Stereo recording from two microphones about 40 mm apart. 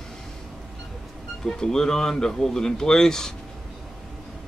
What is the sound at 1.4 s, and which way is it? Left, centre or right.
Speech, centre.